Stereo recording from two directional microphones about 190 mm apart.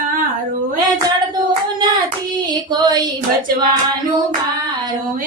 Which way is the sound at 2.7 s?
20° right (ahead or behind).